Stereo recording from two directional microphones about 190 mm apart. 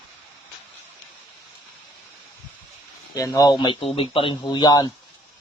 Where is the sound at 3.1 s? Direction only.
20° left (ahead or behind).